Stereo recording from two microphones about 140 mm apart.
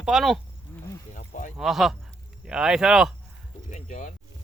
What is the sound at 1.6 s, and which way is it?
Speech, centre (ahead or behind).